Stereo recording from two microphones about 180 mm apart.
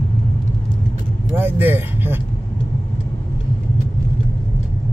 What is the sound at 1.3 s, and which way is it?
Speech, 10° right (ahead or behind).